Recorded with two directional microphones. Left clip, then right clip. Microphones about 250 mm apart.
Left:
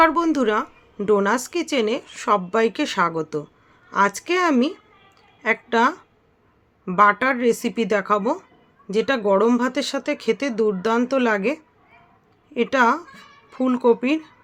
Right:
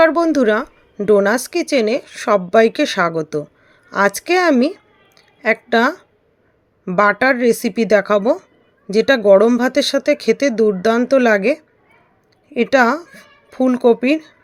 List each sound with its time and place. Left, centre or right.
0.0 s speech: centre